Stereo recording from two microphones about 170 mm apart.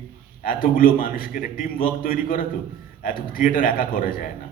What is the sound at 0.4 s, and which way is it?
A man's voice, 55° left (ahead or behind).